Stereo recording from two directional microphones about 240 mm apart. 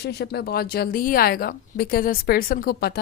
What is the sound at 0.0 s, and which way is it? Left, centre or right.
Speech, left.